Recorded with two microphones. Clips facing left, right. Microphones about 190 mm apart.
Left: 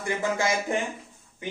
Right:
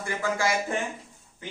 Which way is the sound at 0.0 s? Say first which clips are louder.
Left 1 dB; 20° left (ahead or behind).